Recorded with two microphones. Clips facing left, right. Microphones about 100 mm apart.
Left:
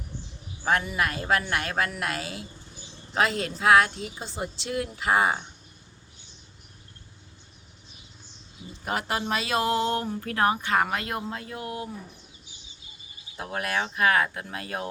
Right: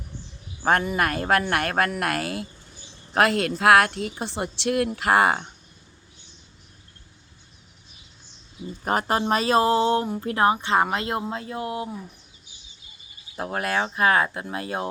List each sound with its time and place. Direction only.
0.6 s a woman's voice: 45° right (ahead or behind); by 5.5 s 70° right (ahead or behind)
8.8 s speech: 40° right (ahead or behind); by 11.9 s 25° right (ahead or behind)
13.3 s speech: 40° right (ahead or behind)